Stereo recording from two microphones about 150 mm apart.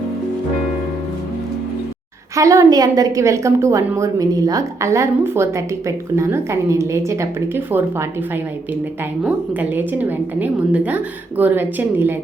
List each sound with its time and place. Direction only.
2.3 s a woman's voice: 20° right (ahead or behind)
9.2 s a woman's voice: 10° right (ahead or behind)